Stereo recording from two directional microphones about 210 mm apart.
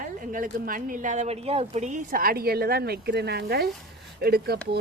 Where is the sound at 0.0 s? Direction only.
40° right (ahead or behind).